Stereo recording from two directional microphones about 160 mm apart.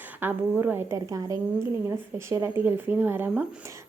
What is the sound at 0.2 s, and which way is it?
Speech, 10° right (ahead or behind).